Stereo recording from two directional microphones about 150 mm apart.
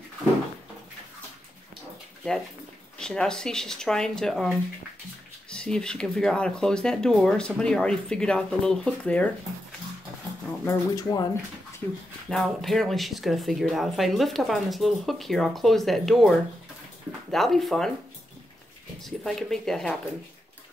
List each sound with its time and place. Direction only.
3.0 s speech: 5° left (ahead or behind)
10.6 s speech: 20° left (ahead or behind)
12.3 s speech: centre (ahead or behind)
19.0 s speech: centre (ahead or behind)